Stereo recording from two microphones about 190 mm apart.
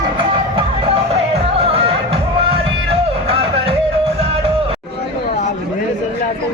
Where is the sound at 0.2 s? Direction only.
25° right (ahead or behind).